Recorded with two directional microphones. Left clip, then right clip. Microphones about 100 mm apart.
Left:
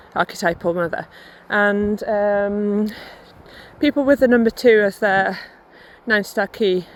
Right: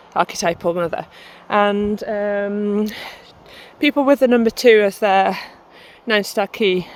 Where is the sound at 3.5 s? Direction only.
35° right (ahead or behind).